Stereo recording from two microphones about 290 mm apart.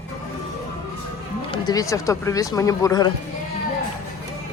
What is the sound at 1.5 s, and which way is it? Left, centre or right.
Speech, centre.